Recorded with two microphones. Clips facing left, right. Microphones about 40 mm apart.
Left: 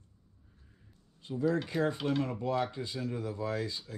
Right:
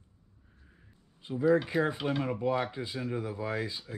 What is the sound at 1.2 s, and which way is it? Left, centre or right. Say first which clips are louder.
Speech: right 5 dB; centre.